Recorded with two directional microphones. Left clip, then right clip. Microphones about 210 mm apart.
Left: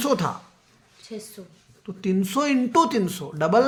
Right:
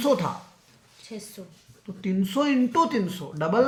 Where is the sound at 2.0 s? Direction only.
45° left (ahead or behind).